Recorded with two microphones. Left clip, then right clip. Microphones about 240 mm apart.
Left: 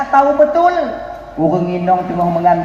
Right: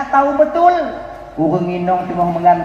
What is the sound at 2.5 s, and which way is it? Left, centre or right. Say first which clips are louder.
Speech: right 1 dB; left.